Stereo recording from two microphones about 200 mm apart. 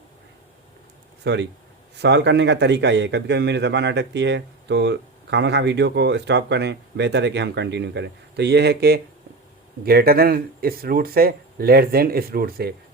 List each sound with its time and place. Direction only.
1.2 s a man's voice: 60° right (ahead or behind)